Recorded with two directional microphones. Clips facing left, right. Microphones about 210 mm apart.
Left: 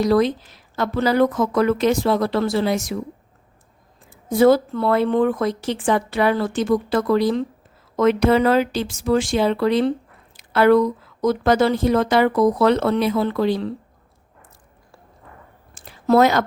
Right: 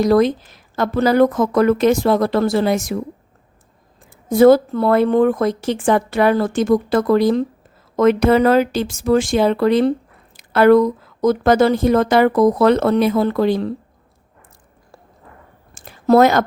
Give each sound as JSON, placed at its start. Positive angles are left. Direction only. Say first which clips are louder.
{"t": 0.0, "sound": "speech", "louder": "right 3 dB", "side_deg": -50}
{"t": 4.3, "sound": "speech", "louder": "right 4 dB", "side_deg": -50}
{"t": 15.7, "sound": "a sound", "louder": "right 3 dB", "side_deg": -45}